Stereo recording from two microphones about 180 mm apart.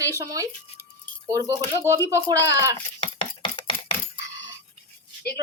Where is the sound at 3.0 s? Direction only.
30° left (ahead or behind).